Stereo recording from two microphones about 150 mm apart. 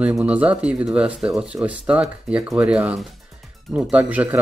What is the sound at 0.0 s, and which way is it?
Speech, 10° right (ahead or behind).